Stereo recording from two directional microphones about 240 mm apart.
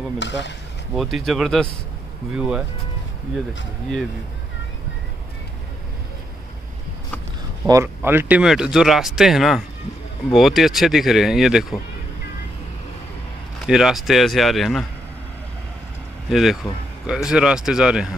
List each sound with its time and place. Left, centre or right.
0.2 s speech: left
0.9 s speech: centre
7.6 s speech: centre
13.7 s speech: centre
16.3 s speech: centre